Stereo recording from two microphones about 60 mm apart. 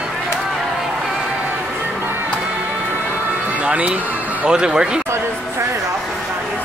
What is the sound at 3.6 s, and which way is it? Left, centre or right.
Speech, right.